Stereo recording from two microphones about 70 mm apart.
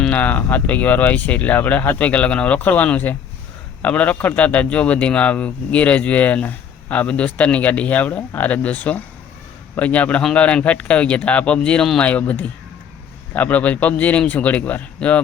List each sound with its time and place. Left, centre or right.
0.1 s speech: left